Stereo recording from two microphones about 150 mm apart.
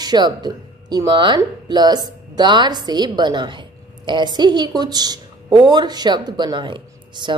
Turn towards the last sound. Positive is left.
turn(degrees=-30)  # may be behind; listen again after turning